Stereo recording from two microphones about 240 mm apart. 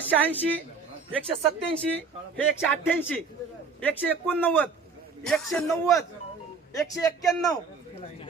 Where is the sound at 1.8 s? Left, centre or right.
Centre.